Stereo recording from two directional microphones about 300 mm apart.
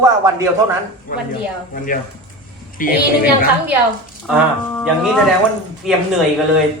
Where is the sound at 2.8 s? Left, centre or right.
Left.